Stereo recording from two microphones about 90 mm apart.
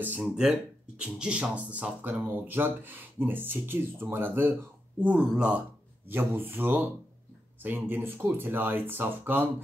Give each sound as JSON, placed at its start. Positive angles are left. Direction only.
{"t": 0.0, "sound": "speech", "side_deg": -15}
{"t": 5.0, "sound": "speech", "side_deg": -15}
{"t": 6.0, "sound": "speech", "side_deg": -25}